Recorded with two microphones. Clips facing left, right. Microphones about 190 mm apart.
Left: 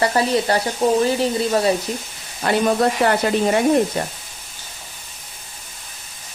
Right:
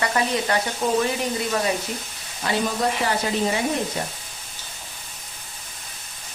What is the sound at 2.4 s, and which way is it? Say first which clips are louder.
Speech: left 6 dB; 60° left (ahead or behind).